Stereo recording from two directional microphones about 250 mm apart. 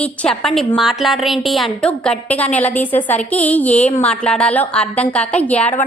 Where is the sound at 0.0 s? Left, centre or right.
Centre.